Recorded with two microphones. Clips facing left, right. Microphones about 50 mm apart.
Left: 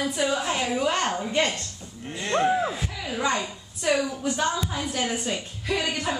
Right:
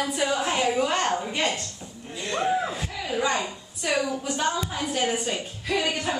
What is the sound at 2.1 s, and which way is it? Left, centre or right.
Cattle, left.